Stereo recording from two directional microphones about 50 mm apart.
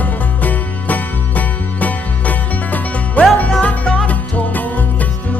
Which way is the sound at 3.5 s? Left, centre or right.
Left.